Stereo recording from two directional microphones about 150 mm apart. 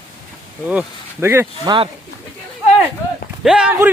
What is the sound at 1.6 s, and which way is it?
Speech, 30° right (ahead or behind).